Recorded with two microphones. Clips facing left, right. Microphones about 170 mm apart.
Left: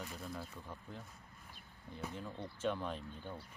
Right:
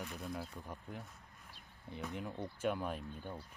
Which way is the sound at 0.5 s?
15° right (ahead or behind).